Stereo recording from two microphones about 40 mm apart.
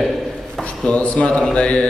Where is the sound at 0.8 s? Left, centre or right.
Left.